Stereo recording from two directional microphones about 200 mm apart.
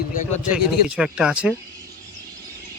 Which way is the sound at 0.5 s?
5° right (ahead or behind).